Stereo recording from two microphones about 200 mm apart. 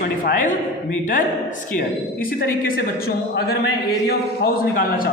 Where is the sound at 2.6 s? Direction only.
45° left (ahead or behind).